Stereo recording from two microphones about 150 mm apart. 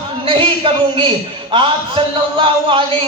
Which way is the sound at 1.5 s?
35° right (ahead or behind).